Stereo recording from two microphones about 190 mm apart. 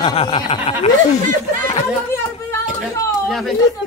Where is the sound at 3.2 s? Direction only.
Centre (ahead or behind).